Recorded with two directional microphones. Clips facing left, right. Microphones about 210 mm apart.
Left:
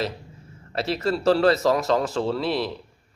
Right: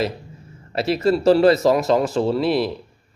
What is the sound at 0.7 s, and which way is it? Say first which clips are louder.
Speech: right 6 dB; 10° right (ahead or behind).